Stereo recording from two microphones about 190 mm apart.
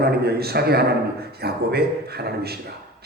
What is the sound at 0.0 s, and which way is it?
A man's voice, 55° right (ahead or behind).